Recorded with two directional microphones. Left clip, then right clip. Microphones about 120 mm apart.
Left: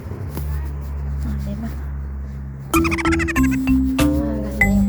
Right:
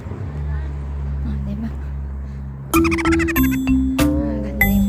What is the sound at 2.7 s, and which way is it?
Music, centre (ahead or behind).